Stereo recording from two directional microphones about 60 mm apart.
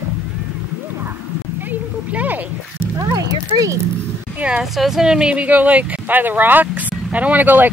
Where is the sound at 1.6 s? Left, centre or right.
Right.